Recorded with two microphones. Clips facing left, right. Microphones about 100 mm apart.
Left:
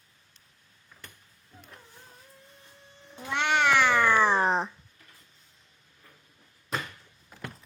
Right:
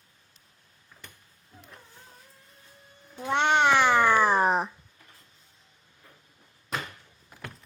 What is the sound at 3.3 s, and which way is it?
Cat, 30° right (ahead or behind).